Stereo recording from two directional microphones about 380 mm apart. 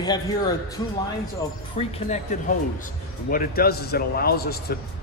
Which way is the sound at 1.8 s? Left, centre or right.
Centre.